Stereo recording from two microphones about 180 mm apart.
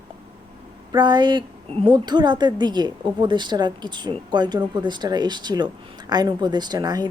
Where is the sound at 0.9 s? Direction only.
25° right (ahead or behind).